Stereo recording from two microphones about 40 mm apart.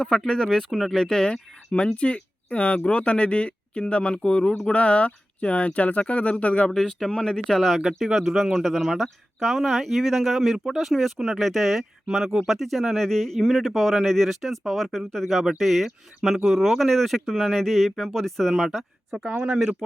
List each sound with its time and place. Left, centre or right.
0.0 s speech: centre
0.7 s speech: centre
0.9 s speech: centre
1.7 s speech: left
6.7 s speech: centre
15.4 s speech: centre
19.1 s speech: right